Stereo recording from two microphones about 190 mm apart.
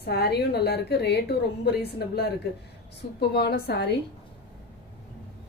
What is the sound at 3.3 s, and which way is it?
Speech, 60° left (ahead or behind).